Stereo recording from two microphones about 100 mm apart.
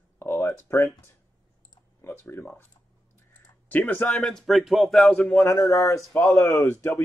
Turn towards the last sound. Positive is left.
turn(degrees=25)  # may be behind; listen again after turning